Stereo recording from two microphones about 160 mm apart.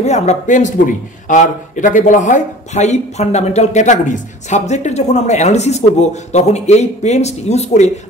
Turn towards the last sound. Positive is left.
turn(degrees=45)  # may be behind; listen again after turning